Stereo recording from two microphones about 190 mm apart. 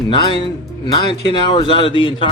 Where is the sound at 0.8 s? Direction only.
25° left (ahead or behind).